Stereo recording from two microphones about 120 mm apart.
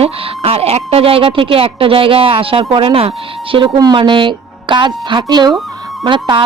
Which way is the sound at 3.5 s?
40° right (ahead or behind).